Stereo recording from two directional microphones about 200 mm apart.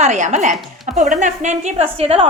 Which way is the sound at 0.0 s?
35° right (ahead or behind).